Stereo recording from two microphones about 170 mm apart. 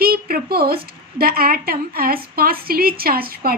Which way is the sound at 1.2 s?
60° right (ahead or behind).